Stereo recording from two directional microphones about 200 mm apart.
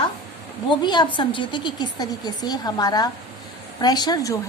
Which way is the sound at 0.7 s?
20° left (ahead or behind).